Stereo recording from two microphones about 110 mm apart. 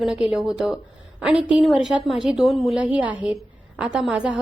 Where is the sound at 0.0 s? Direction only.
5° right (ahead or behind).